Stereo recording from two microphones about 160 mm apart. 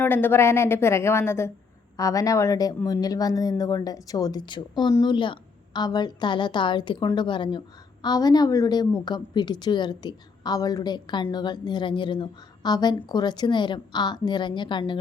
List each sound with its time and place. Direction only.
0.0 s a woman's voice: 15° left (ahead or behind); by 14.9 s 30° left (ahead or behind)